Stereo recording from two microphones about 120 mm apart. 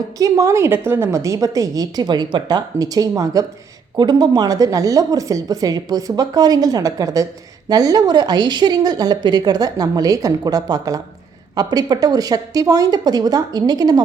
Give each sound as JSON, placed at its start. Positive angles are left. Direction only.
{"t": 0.2, "sound": "a woman's voice", "side_deg": -25}